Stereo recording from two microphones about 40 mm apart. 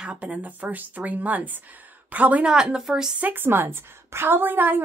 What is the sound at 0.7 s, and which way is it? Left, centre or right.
A woman's voice, right.